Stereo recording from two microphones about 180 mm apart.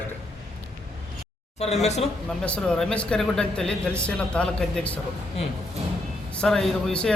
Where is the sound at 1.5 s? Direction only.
35° left (ahead or behind).